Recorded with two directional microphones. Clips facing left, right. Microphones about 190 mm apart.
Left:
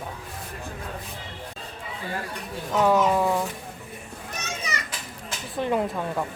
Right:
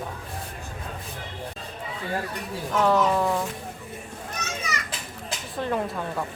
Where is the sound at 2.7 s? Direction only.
10° left (ahead or behind).